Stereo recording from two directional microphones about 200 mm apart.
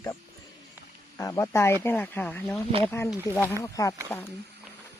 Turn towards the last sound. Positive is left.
turn(degrees=10)  # may be behind; listen again after turning